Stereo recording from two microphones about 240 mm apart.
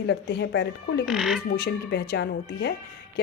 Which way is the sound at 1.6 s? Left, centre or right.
Left.